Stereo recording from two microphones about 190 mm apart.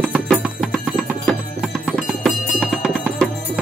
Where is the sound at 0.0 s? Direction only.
Centre (ahead or behind).